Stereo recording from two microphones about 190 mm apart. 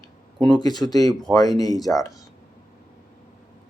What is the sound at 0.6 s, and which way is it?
Speech, 20° left (ahead or behind).